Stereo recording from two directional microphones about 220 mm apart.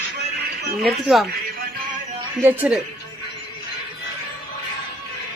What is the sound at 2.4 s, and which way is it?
Speech, 10° right (ahead or behind).